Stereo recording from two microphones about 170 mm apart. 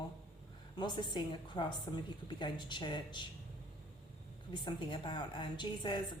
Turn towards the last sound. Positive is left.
turn(degrees=25)  # may be behind; listen again after turning